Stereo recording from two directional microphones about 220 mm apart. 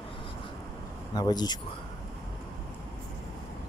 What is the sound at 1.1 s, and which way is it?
Speech, 20° left (ahead or behind).